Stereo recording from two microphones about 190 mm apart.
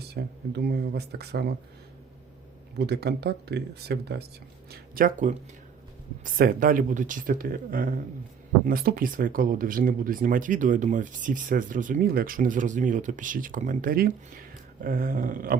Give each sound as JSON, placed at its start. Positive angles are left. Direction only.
{"t": 0.0, "sound": "speech", "side_deg": -60}
{"t": 2.7, "sound": "speech", "side_deg": -60}
{"t": 4.7, "sound": "speech", "side_deg": -50}